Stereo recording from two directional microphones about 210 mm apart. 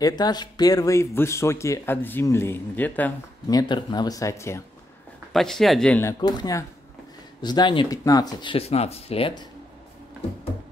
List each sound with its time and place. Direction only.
0.0 s speech: 20° left (ahead or behind)
5.3 s speech: centre (ahead or behind); by 9.5 s 25° left (ahead or behind)